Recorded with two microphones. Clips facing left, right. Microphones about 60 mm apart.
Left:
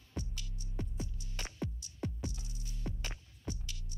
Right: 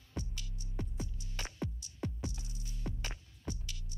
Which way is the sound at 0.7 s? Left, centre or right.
Right.